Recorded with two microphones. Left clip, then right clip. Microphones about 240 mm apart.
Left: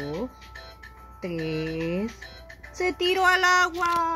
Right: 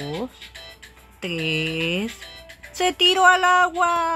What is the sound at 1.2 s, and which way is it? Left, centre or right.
Speech, right.